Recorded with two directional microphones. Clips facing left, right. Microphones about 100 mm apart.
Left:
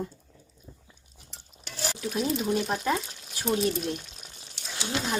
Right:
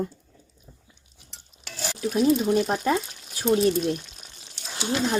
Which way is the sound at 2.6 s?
45° right (ahead or behind).